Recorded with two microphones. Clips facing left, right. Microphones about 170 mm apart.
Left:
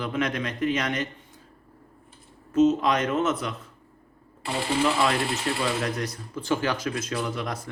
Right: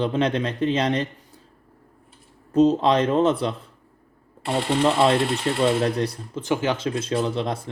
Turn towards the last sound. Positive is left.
turn(degrees=-30)  # may be behind; listen again after turning